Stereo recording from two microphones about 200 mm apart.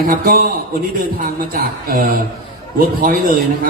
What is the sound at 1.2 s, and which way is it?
Speech, 45° right (ahead or behind).